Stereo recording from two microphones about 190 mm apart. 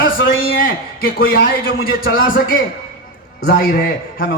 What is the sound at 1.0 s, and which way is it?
A man's voice, 50° left (ahead or behind).